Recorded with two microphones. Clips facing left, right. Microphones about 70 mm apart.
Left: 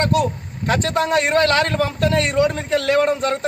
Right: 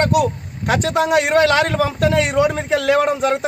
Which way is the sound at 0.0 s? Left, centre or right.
Centre.